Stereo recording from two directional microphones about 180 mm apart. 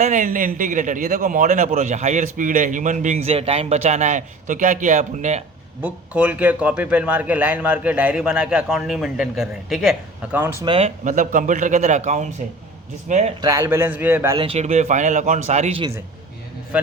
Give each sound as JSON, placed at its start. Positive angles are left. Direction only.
{"t": 0.0, "sound": "a man's voice", "side_deg": -45}
{"t": 5.8, "sound": "a man's voice", "side_deg": -10}
{"t": 10.3, "sound": "a man's voice", "side_deg": -15}
{"t": 10.7, "sound": "a man's voice", "side_deg": -35}
{"t": 13.4, "sound": "a man's voice", "side_deg": -20}
{"t": 14.3, "sound": "speech", "side_deg": -30}